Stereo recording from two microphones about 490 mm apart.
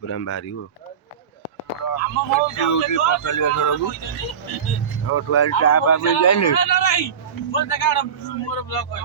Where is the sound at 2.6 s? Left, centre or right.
Left.